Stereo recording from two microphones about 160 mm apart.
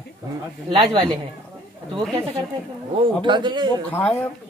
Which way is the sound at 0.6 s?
30° right (ahead or behind).